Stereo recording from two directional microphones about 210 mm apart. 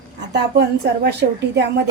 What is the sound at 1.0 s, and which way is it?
Speech, 50° right (ahead or behind).